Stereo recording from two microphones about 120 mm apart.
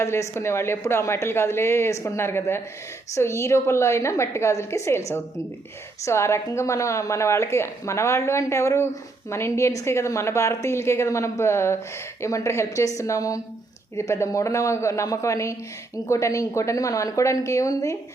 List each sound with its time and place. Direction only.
0.0 s a woman's voice: 20° left (ahead or behind)